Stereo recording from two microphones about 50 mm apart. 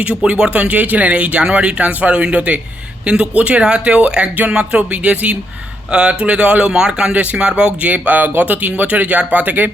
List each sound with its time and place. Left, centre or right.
0.0 s speech: right